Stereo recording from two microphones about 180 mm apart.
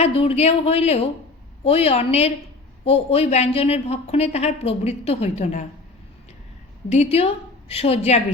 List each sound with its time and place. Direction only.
0.0 s a woman's voice: 35° left (ahead or behind)
6.9 s a woman's voice: 35° left (ahead or behind)